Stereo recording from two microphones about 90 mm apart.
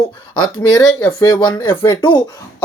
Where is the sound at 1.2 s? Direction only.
55° left (ahead or behind).